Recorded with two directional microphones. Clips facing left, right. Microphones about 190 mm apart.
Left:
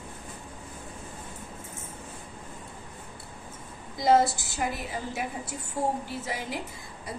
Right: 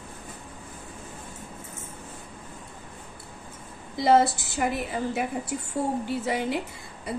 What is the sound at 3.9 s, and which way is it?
A woman's voice, 60° right (ahead or behind).